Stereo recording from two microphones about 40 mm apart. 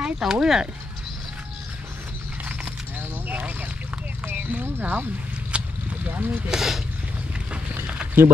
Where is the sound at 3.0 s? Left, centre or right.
Right.